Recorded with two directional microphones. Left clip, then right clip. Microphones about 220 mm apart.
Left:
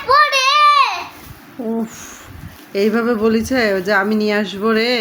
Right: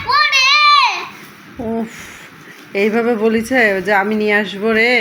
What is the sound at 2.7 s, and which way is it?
Speech, 15° left (ahead or behind).